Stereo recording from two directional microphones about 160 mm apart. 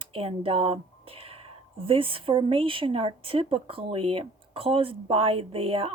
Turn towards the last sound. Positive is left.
turn(degrees=-35)  # may be behind; listen again after turning